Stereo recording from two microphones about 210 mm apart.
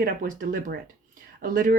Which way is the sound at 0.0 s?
40° right (ahead or behind).